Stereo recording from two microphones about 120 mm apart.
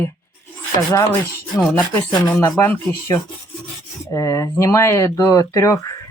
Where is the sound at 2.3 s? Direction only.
15° left (ahead or behind).